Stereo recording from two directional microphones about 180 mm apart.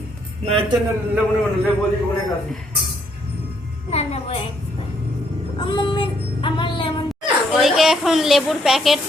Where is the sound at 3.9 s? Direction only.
35° left (ahead or behind).